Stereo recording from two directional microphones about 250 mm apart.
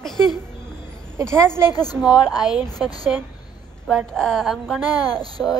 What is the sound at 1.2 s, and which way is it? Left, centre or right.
Speech, centre.